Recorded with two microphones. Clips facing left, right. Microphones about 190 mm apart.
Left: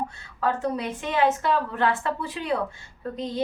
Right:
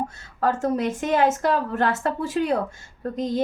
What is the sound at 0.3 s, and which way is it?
A woman's voice, 45° right (ahead or behind).